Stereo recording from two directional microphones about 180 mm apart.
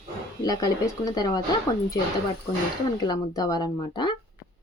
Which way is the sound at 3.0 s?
20° left (ahead or behind).